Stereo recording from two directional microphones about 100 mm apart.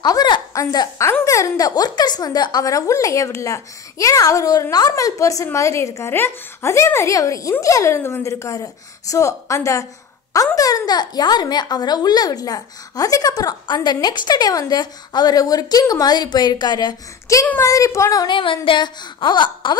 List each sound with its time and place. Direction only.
0.0 s a sound: 45° left (ahead or behind)
1.2 s a woman's voice: 35° left (ahead or behind)
18.2 s speech: 55° left (ahead or behind)